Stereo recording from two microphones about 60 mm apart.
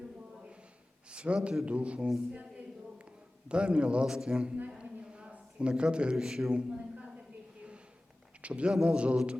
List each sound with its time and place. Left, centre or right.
0.3 s a sound: centre
1.6 s a man's voice: right
3.5 s a man's voice: centre
4.7 s a sound: centre
8.4 s a man's voice: centre
8.7 s a man's voice: centre
9.0 s a man's voice: centre